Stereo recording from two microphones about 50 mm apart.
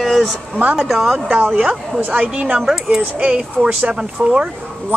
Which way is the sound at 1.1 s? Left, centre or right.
Right.